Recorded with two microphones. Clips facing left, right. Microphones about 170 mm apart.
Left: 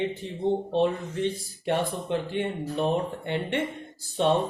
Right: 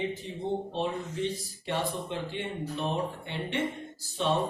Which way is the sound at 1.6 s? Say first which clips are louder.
Left 5 dB; 55° left (ahead or behind).